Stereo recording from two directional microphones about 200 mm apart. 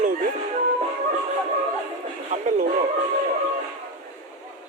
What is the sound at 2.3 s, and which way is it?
Music, 35° right (ahead or behind).